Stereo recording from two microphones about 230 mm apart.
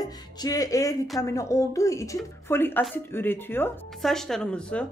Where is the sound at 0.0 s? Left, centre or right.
Centre.